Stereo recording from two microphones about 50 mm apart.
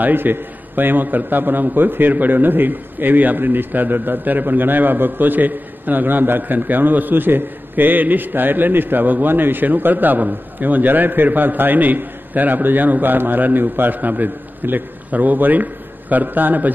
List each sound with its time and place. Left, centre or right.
0.0 s a man's voice: right